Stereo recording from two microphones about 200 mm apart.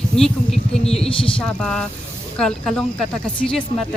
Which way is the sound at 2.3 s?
Centre (ahead or behind).